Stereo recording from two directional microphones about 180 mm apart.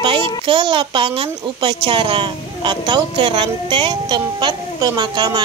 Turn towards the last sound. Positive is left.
turn(degrees=-25)  # may be behind; listen again after turning